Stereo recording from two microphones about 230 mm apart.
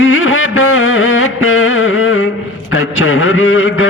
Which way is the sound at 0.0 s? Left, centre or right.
Left.